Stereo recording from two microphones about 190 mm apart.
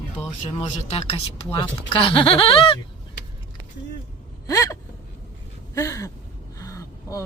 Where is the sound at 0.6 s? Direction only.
35° left (ahead or behind).